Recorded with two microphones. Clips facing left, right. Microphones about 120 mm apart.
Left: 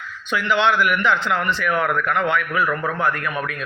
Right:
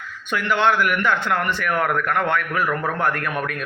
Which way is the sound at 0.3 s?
50° right (ahead or behind).